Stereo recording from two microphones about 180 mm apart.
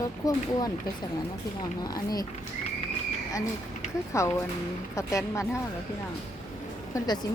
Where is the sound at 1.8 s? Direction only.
20° left (ahead or behind).